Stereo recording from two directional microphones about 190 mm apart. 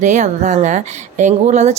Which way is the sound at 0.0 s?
40° right (ahead or behind).